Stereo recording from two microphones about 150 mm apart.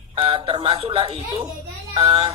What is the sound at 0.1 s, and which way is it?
A man's voice, 35° right (ahead or behind).